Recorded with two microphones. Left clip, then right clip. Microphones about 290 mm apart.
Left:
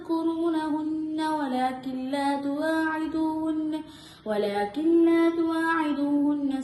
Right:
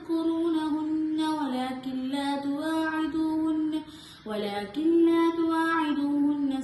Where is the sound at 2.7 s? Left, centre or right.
Left.